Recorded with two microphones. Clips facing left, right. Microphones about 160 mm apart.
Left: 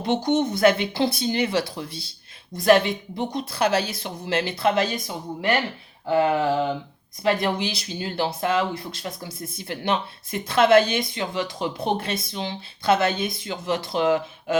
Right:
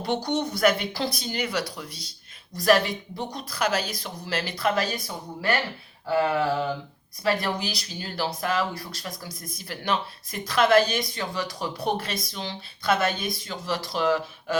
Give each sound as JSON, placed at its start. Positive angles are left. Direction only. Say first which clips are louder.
{"t": 0.0, "sound": "speech", "louder": "left 5 dB", "side_deg": 20}